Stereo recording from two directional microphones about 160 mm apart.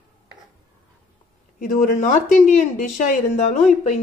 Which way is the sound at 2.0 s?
50° left (ahead or behind).